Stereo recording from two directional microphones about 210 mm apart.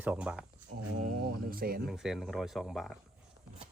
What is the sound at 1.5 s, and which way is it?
Speech, 45° right (ahead or behind).